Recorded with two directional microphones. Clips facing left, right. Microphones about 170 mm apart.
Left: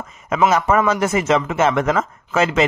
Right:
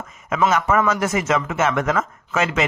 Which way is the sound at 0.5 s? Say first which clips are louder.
Left 2 dB; 30° left (ahead or behind).